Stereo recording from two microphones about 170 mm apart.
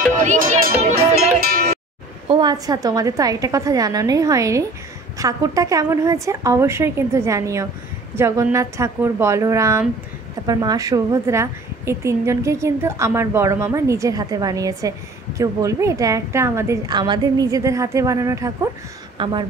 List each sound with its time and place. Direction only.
0.2 s music: 45° right (ahead or behind)
1.4 s music: 60° right (ahead or behind)
2.2 s a woman's voice: 25° right (ahead or behind)
19.1 s speech: 30° right (ahead or behind)